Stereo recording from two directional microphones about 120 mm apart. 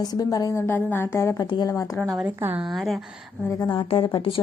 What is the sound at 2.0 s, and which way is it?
Speech, centre (ahead or behind).